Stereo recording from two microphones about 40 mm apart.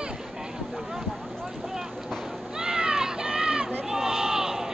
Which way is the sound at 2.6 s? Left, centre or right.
Centre.